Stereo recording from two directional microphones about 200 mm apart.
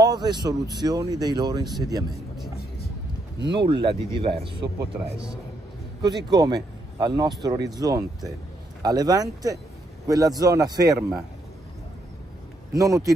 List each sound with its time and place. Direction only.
0.0 s speech: 20° right (ahead or behind)
3.5 s speech: 25° right (ahead or behind)
4.9 s a man's voice: 5° right (ahead or behind)
6.0 s a man's voice: 20° right (ahead or behind)
12.7 s a man's voice: 15° right (ahead or behind)